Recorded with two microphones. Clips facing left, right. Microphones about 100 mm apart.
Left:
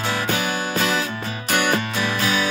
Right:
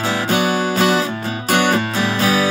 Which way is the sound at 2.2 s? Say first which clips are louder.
Right 6 dB; 35° right (ahead or behind).